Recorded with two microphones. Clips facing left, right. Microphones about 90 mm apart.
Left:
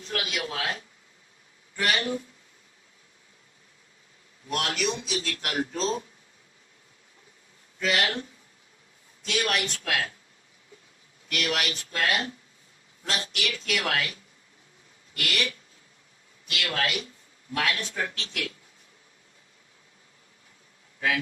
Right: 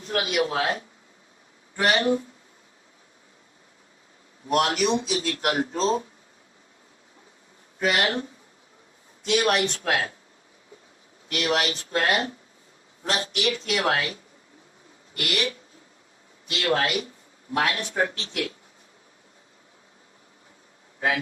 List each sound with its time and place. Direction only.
0.0 s a sound: 35° right (ahead or behind)
0.3 s speech: 30° right (ahead or behind)
4.4 s speech: 35° right (ahead or behind)
7.9 s speech: 30° right (ahead or behind)
9.5 s speech: 35° right (ahead or behind)
11.3 s speech: 35° right (ahead or behind)
13.1 s speech: 25° right (ahead or behind)